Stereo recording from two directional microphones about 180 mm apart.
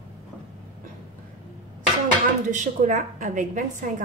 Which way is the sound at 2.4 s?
45° right (ahead or behind).